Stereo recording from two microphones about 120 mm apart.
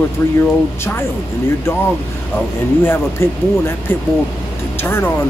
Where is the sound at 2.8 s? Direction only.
20° left (ahead or behind).